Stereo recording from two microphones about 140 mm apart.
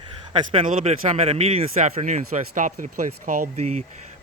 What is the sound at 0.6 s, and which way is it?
Speech, 60° right (ahead or behind).